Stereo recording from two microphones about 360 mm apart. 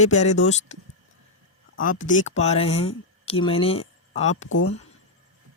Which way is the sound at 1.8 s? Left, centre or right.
Left.